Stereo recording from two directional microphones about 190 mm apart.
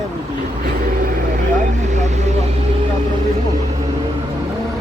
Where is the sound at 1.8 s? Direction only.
40° right (ahead or behind).